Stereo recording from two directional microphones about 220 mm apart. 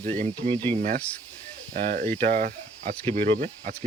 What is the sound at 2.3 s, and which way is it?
Speech, 45° right (ahead or behind).